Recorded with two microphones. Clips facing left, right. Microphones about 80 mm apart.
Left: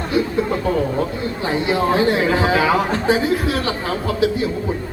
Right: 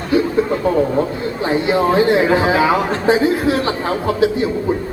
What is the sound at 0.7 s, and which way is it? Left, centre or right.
A man's voice, right.